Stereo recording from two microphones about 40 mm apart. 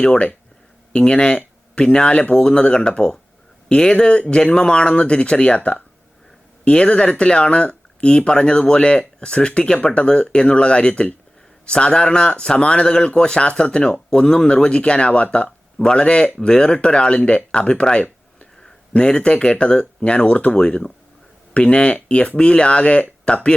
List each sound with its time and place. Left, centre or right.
0.0 s speech: left
14.3 s speech: left